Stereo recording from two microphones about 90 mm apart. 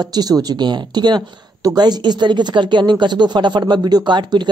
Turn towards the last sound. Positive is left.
turn(degrees=-55)  # may be behind; listen again after turning